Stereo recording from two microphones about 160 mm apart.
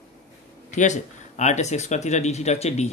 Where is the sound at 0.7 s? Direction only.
50° left (ahead or behind).